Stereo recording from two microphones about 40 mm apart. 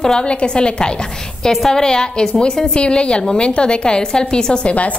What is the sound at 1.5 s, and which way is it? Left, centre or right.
A woman's voice, centre.